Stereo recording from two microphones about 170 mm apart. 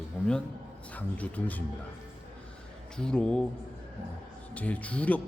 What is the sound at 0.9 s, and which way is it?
Speech, 10° left (ahead or behind).